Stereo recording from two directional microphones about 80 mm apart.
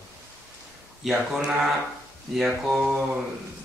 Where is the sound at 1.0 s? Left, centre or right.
Centre.